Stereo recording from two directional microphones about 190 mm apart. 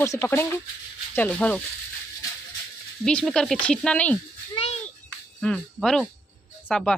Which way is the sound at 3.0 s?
5° left (ahead or behind).